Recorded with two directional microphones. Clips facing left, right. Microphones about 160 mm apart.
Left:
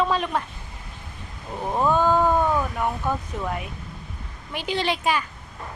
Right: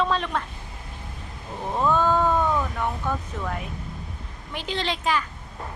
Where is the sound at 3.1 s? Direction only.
10° left (ahead or behind).